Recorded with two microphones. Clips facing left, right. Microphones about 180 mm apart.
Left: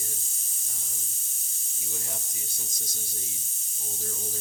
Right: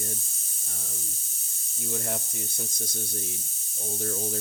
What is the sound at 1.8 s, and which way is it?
Speech, 60° right (ahead or behind).